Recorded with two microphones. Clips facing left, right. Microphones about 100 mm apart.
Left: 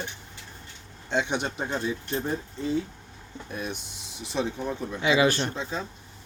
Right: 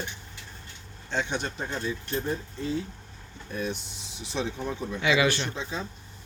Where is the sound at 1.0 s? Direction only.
20° left (ahead or behind).